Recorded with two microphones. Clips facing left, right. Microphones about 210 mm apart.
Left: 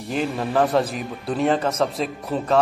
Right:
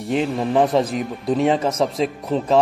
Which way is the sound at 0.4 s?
Centre (ahead or behind).